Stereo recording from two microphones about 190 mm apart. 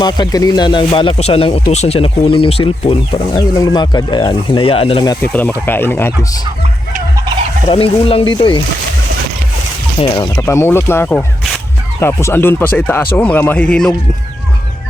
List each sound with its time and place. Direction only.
0.0 s speech: 20° left (ahead or behind)
5.2 s speech: 10° left (ahead or behind)
7.7 s speech: 30° left (ahead or behind)
10.0 s speech: 25° left (ahead or behind)
10.3 s speech: 10° left (ahead or behind)